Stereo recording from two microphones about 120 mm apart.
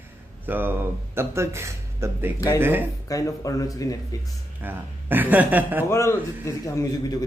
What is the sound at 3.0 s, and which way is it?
Speech, 30° left (ahead or behind).